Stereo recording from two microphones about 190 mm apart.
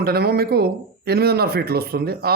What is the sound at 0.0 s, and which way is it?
A man's voice, 55° right (ahead or behind).